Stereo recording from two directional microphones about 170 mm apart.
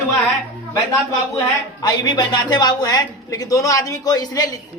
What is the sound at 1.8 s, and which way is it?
A man's voice, 25° left (ahead or behind).